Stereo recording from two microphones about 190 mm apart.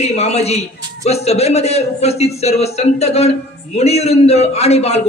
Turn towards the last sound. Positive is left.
turn(degrees=35)  # may be behind; listen again after turning